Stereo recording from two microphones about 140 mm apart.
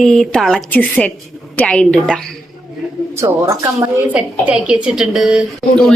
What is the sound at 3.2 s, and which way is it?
Speech, 20° right (ahead or behind).